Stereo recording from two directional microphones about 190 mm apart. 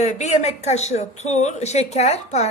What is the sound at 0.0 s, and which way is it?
Speech, 35° left (ahead or behind).